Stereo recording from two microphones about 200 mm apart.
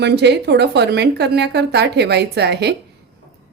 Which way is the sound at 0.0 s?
55° right (ahead or behind).